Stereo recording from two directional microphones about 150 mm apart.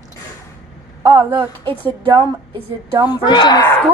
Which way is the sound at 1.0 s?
30° right (ahead or behind).